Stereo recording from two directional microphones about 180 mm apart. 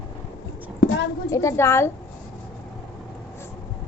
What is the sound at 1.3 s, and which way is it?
Speech, 15° left (ahead or behind).